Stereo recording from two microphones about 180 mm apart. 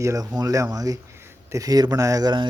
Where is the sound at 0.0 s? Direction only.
15° right (ahead or behind).